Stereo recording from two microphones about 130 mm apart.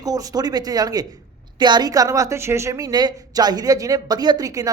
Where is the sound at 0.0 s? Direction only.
25° right (ahead or behind).